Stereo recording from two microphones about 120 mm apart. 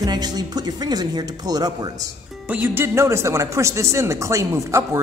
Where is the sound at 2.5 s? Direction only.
15° right (ahead or behind).